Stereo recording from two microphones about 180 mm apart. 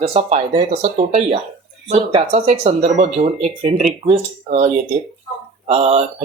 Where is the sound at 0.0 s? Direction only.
30° right (ahead or behind).